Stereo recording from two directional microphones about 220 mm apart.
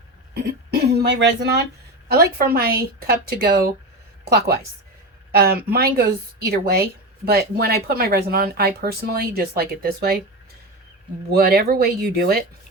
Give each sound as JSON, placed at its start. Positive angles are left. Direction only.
{"t": 0.3, "sound": "a woman's voice", "side_deg": -50}
{"t": 11.3, "sound": "a woman's voice", "side_deg": -45}